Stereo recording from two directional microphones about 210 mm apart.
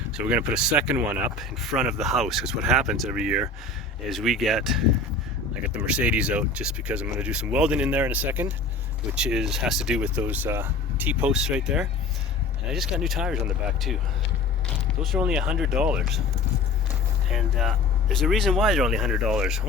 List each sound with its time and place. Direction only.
0.2 s speech: 5° right (ahead or behind)
15.0 s speech: centre (ahead or behind)
17.2 s speech: centre (ahead or behind)